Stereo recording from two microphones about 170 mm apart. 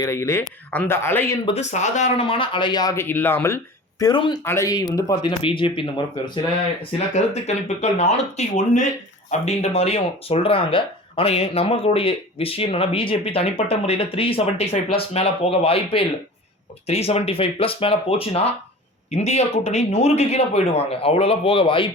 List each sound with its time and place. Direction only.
0.0 s speech: 15° left (ahead or behind)
1.5 s speech: 40° left (ahead or behind)
7.1 s speech: 40° left (ahead or behind)